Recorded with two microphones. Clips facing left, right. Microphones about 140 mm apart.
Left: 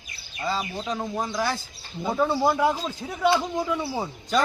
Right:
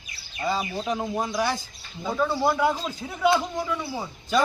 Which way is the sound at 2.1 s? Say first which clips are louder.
Left 1 dB; 20° left (ahead or behind).